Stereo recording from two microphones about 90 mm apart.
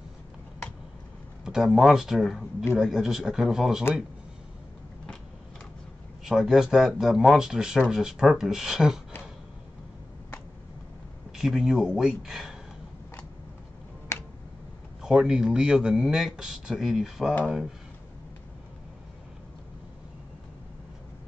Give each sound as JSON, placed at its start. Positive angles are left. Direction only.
{"t": 1.4, "sound": "speech", "side_deg": -5}
{"t": 6.2, "sound": "speech", "side_deg": -5}
{"t": 11.3, "sound": "speech", "side_deg": 0}
{"t": 15.0, "sound": "speech", "side_deg": -5}